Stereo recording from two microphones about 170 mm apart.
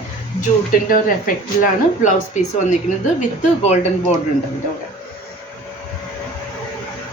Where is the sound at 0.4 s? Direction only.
55° left (ahead or behind).